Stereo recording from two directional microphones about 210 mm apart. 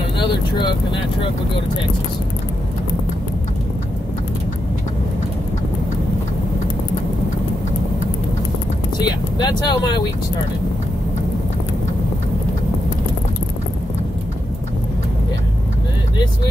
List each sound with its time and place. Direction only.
0.2 s speech: 20° left (ahead or behind)
9.0 s speech: 20° left (ahead or behind)